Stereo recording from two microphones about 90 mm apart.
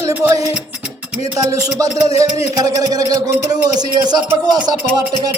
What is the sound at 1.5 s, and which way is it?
A man's voice, 40° right (ahead or behind).